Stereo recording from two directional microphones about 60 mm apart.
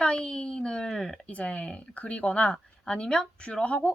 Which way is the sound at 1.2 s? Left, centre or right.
Left.